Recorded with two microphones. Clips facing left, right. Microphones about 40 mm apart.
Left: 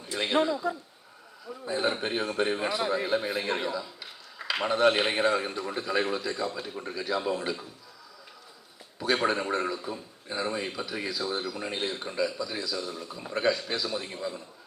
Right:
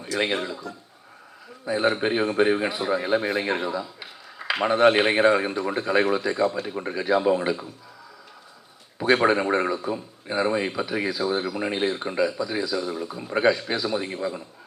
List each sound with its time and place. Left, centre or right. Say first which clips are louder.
0.7 s a man's voice: left 7 dB; left
1.6 s a man's voice: right 6 dB; right
3.7 s a sound: right 4 dB; right
4.6 s speech: right 6 dB; right
9.1 s speech: right 6 dB; right